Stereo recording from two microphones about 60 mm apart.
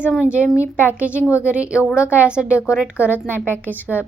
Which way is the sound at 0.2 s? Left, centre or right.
Right.